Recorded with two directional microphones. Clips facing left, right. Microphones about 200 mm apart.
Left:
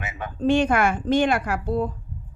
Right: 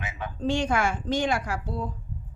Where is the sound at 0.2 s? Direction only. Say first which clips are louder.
Left 7 dB; 55° left (ahead or behind).